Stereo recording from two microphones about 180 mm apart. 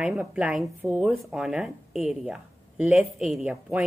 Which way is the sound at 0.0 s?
5° right (ahead or behind).